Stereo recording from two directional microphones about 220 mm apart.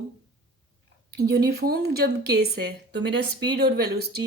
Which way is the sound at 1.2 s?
45° right (ahead or behind).